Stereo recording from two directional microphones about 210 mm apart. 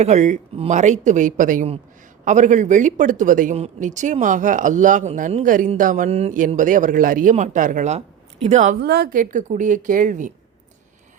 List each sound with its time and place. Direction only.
0.0 s speech: 35° right (ahead or behind)
8.8 s speech: 50° right (ahead or behind)